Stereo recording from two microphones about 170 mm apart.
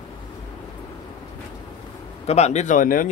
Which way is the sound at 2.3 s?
40° left (ahead or behind).